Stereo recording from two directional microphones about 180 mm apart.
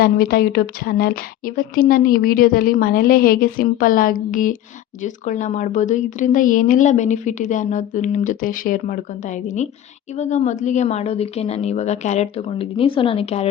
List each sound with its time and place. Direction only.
0.0 s a woman's voice: 55° left (ahead or behind); by 13.5 s 35° left (ahead or behind)